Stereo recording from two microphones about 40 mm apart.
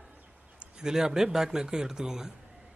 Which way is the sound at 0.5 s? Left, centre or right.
Centre.